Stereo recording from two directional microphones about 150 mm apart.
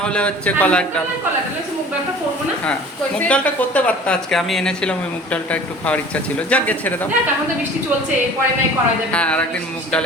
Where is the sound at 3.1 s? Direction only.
10° left (ahead or behind).